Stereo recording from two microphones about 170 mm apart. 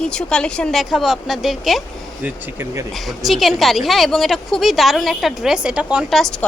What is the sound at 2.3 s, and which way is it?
Speech, 15° right (ahead or behind).